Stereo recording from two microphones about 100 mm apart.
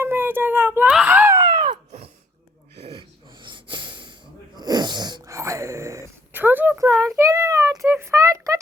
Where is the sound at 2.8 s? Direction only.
80° right.